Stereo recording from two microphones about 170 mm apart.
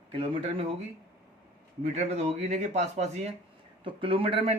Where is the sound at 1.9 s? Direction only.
40° right (ahead or behind).